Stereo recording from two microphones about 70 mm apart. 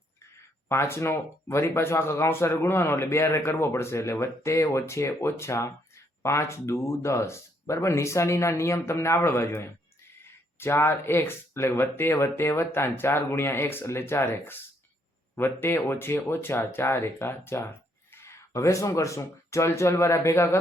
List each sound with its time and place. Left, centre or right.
0.7 s speech: left